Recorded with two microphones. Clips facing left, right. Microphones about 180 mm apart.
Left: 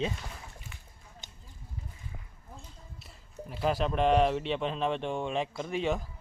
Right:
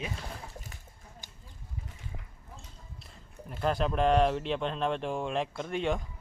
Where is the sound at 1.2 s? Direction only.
20° left (ahead or behind).